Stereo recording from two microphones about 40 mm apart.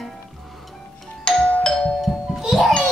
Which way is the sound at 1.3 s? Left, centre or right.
Left.